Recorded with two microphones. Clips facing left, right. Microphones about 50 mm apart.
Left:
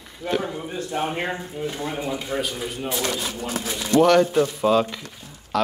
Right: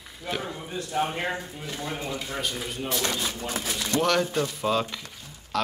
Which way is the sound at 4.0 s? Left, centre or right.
Centre.